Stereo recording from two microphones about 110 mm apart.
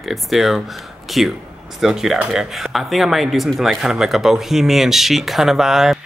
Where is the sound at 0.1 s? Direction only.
Centre (ahead or behind).